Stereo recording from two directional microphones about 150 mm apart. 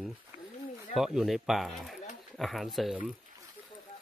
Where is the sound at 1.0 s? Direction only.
Centre (ahead or behind).